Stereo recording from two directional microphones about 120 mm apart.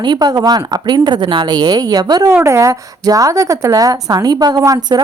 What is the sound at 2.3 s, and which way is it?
A woman's voice, 20° right (ahead or behind).